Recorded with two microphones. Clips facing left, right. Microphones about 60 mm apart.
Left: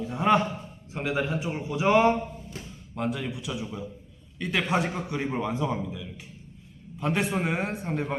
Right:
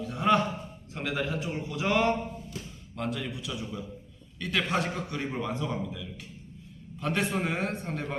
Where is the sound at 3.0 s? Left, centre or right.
Centre.